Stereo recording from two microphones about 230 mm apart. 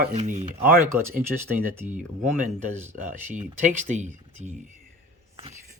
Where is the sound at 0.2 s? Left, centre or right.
Right.